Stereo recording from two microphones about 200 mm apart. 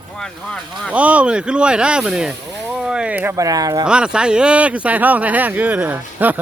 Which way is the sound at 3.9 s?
5° right (ahead or behind).